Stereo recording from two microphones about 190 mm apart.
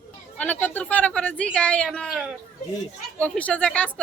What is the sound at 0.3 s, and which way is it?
Speech, 10° left (ahead or behind).